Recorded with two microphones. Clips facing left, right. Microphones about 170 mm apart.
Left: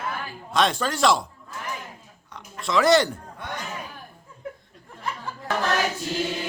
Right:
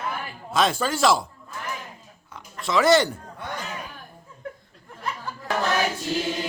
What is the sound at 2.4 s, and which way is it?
Speech, centre (ahead or behind).